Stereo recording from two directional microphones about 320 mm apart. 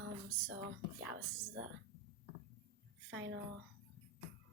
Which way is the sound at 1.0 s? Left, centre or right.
Right.